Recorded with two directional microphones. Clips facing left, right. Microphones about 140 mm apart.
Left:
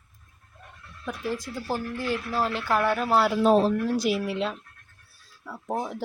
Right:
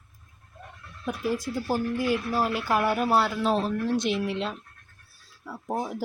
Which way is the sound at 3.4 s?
45° left (ahead or behind).